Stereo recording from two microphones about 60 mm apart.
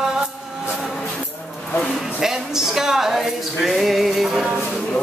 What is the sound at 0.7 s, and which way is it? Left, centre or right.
Music, centre.